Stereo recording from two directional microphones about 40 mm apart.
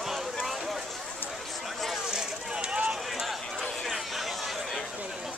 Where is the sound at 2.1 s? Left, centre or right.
Right.